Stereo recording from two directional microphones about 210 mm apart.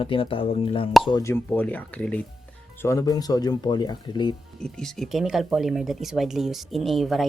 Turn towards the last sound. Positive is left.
turn(degrees=0)  # may be behind; listen again after turning